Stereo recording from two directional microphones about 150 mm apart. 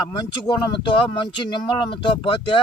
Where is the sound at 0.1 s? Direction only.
30° left (ahead or behind).